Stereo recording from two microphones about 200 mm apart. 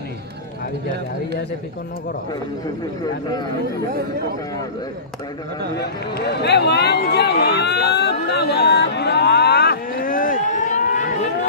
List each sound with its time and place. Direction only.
3.0 s speech: 20° left (ahead or behind)
5.8 s speech: 55° left (ahead or behind); by 11.1 s 40° left (ahead or behind)